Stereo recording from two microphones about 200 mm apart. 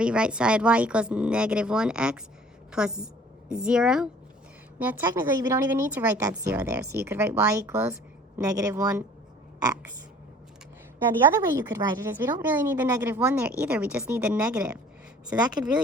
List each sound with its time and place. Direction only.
0.0 s a woman's voice: 5° right (ahead or behind)
11.3 s a woman's voice: 15° right (ahead or behind)
15.3 s speech: 20° right (ahead or behind)